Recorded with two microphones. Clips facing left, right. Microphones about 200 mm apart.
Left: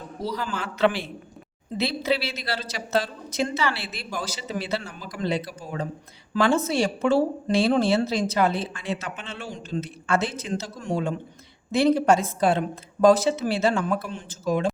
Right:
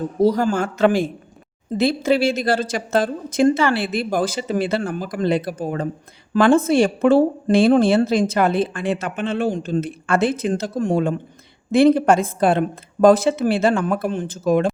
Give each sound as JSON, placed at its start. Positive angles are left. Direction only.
{"t": 0.2, "sound": "a woman's voice", "side_deg": -50}